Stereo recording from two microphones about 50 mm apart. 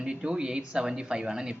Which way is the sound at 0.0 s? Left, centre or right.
Centre.